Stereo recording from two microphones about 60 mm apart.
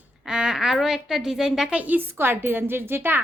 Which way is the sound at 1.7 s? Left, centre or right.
Right.